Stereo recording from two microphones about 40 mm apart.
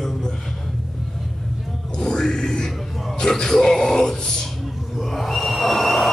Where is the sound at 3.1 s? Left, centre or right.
Centre.